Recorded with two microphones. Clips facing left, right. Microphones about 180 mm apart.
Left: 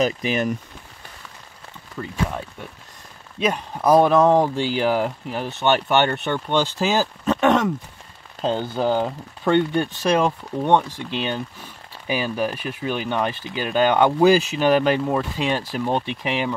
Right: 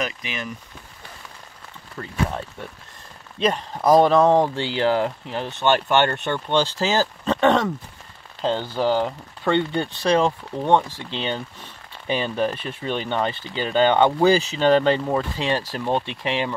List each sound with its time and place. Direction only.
0.0 s speech: 40° left (ahead or behind)
3.3 s speech: 5° left (ahead or behind)